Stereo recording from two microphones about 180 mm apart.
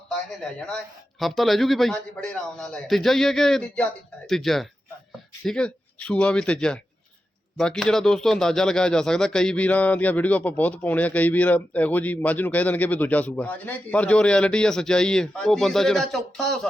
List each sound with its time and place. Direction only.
1.2 s speech: centre (ahead or behind)